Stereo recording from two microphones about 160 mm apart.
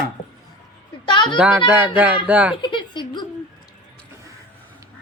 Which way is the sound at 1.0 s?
30° left (ahead or behind).